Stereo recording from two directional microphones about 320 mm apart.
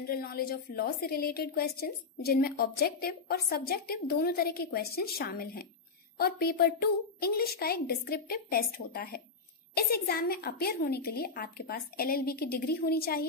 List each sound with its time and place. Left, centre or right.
0.0 s a woman's voice: left